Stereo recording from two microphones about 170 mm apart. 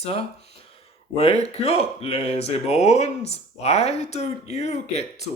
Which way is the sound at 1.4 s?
35° left (ahead or behind).